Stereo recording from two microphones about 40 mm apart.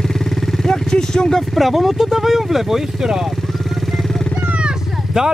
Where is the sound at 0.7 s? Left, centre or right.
Centre.